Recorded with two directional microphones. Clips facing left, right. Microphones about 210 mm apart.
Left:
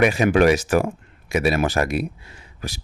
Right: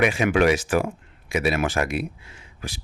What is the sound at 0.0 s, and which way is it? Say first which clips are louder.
Speech: left 3 dB; 40° left (ahead or behind).